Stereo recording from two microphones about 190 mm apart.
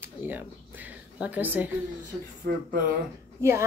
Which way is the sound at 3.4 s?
15° right (ahead or behind).